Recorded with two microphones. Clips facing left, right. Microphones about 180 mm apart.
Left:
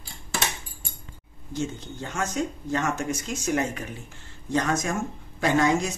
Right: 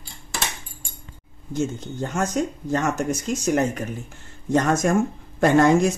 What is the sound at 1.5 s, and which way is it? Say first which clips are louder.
Speech: right 5 dB; 45° right (ahead or behind).